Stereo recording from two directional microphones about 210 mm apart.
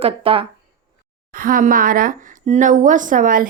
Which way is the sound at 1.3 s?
40° right (ahead or behind).